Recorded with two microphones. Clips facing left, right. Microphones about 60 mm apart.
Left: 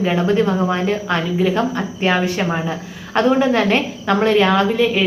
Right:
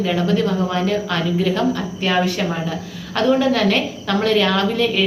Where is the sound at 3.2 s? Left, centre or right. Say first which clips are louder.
Left 2 dB; left.